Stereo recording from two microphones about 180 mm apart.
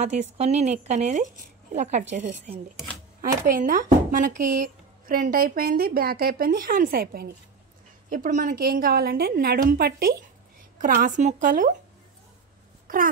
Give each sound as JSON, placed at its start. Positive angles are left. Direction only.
{"t": 0.0, "sound": "a woman's voice", "side_deg": -40}
{"t": 10.8, "sound": "speech", "side_deg": -45}
{"t": 12.8, "sound": "a sound", "side_deg": -50}